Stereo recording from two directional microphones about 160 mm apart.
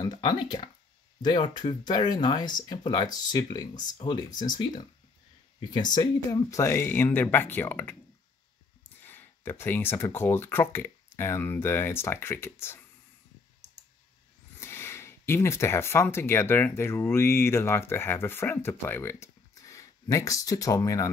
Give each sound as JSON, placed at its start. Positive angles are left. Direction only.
{"t": 0.0, "sound": "speech", "side_deg": 25}
{"t": 9.0, "sound": "speech", "side_deg": 10}
{"t": 14.6, "sound": "speech", "side_deg": 15}